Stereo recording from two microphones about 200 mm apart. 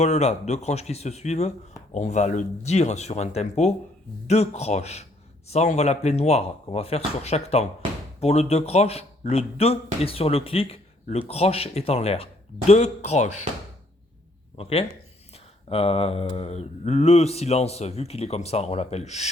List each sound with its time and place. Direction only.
0.0 s a man's voice: 35° left (ahead or behind)
14.5 s a man's voice: 30° left (ahead or behind)